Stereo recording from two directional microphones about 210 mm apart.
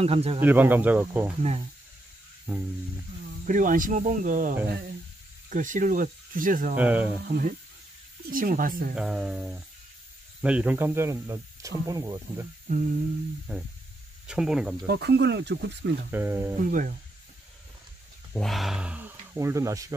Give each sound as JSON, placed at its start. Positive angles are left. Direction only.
{"t": 0.0, "sound": "speech", "side_deg": -30}
{"t": 0.4, "sound": "speech", "side_deg": -10}
{"t": 1.4, "sound": "speech", "side_deg": -30}
{"t": 2.5, "sound": "speech", "side_deg": -10}
{"t": 3.4, "sound": "speech", "side_deg": -40}
{"t": 6.8, "sound": "speech", "side_deg": -5}
{"t": 7.2, "sound": "speech", "side_deg": -45}
{"t": 8.9, "sound": "speech", "side_deg": -5}
{"t": 13.5, "sound": "speech", "side_deg": -5}
{"t": 14.9, "sound": "speech", "side_deg": -50}
{"t": 16.1, "sound": "speech", "side_deg": -10}
{"t": 16.5, "sound": "speech", "side_deg": -40}
{"t": 18.3, "sound": "speech", "side_deg": 0}